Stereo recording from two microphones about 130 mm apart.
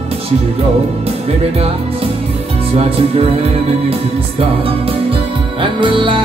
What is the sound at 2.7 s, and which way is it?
Speech, 50° right (ahead or behind).